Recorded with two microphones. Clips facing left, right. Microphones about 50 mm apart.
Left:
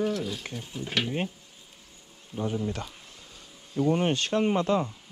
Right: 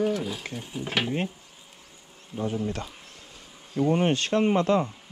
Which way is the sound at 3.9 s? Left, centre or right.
Right.